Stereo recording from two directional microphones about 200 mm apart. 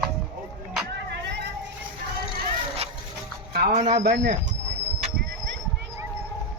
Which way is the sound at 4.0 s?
55° right (ahead or behind).